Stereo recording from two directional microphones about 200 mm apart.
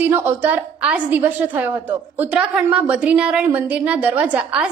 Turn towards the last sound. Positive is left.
turn(degrees=-5)  # may be behind; listen again after turning